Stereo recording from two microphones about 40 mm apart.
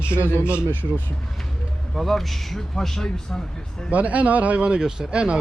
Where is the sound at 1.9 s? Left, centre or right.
Centre.